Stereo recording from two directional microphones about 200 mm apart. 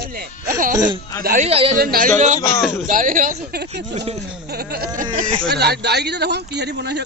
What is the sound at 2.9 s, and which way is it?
Speech, 40° right (ahead or behind).